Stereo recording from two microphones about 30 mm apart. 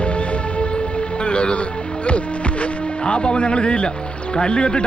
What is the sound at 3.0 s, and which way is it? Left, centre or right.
Speech, left.